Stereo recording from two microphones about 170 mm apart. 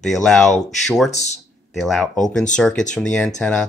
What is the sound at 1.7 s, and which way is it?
Speech, centre (ahead or behind).